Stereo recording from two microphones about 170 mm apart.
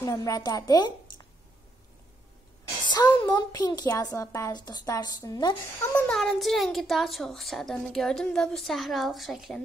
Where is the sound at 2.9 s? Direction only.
25° left (ahead or behind).